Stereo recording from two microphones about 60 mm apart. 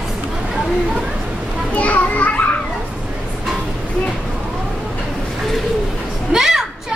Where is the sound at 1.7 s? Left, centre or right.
Left.